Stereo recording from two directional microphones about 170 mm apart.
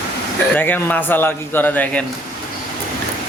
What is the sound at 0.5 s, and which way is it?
A man's voice, 10° left (ahead or behind).